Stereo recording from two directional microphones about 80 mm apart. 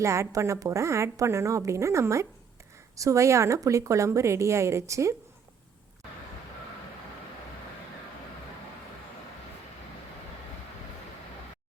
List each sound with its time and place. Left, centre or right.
0.0 s a woman's voice: right